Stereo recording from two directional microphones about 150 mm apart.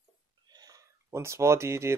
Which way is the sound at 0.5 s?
25° right (ahead or behind).